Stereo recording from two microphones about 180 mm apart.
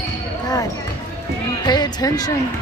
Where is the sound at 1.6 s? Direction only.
25° left (ahead or behind).